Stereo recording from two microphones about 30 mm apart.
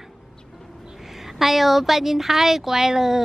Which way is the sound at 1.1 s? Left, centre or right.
Centre.